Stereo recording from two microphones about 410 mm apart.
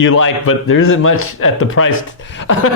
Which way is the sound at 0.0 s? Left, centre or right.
Left.